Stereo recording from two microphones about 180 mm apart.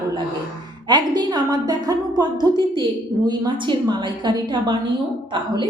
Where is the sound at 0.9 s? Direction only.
25° right (ahead or behind).